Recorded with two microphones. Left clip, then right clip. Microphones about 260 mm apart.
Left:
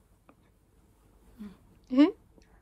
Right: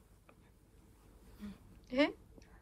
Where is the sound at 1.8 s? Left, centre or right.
Centre.